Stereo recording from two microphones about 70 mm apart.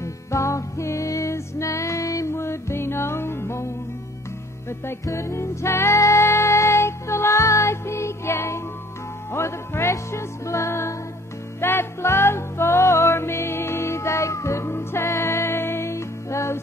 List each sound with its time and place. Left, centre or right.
0.0 s music: left
2.3 s music: left
5.0 s music: left